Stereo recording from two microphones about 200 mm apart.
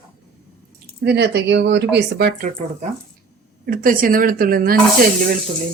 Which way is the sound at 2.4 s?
35° right (ahead or behind).